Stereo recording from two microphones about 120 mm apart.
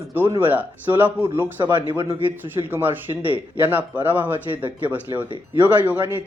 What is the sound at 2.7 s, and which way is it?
A man's voice, 15° right (ahead or behind).